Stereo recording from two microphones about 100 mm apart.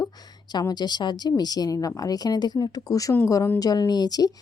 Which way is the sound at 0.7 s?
45° left (ahead or behind).